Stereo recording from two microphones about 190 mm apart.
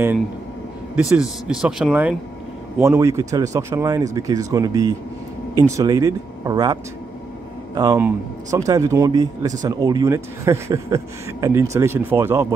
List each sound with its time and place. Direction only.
0.9 s speech: 5° right (ahead or behind)
2.8 s speech: 15° right (ahead or behind)